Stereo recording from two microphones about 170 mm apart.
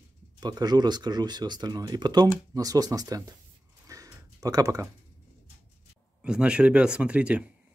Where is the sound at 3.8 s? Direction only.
20° right (ahead or behind).